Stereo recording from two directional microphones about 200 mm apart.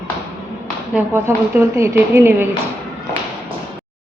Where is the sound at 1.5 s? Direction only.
10° right (ahead or behind).